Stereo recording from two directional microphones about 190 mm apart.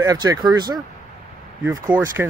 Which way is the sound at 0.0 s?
20° right (ahead or behind).